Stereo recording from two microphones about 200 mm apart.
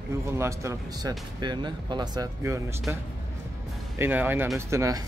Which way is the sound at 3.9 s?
10° right (ahead or behind).